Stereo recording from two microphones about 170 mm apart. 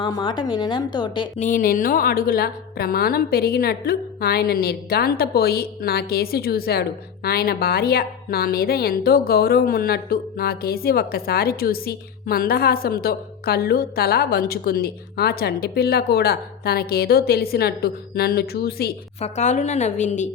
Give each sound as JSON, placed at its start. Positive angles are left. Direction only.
{"t": 0.0, "sound": "a woman's voice", "side_deg": 25}
{"t": 1.4, "sound": "a woman's voice", "side_deg": 50}
{"t": 19.2, "sound": "a woman's voice", "side_deg": 45}